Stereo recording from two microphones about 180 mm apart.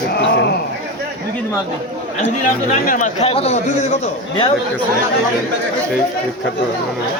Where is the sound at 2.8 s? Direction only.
45° left (ahead or behind).